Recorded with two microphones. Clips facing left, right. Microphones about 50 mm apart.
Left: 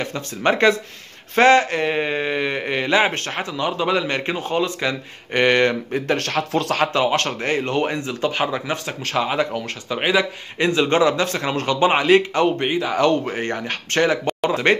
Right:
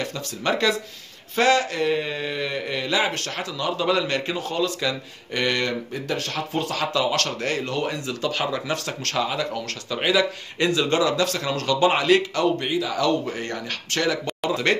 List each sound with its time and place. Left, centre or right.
0.0 s speech: left
6.2 s speech: left
6.7 s speech: left